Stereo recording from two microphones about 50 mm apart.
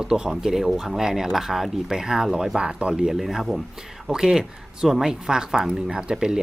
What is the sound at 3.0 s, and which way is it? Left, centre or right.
Speech, centre.